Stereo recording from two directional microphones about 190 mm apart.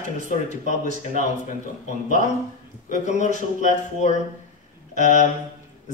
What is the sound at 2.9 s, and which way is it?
Speech, 40° left (ahead or behind).